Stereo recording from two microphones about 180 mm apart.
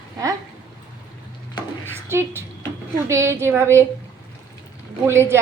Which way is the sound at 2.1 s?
15° right (ahead or behind).